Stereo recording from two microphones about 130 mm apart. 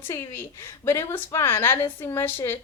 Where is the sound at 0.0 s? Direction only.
20° left (ahead or behind).